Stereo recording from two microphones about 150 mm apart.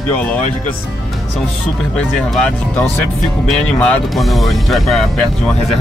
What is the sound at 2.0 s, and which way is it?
Speech, 5° left (ahead or behind).